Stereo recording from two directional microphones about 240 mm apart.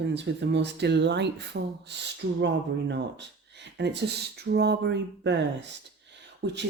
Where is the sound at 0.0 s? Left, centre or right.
Right.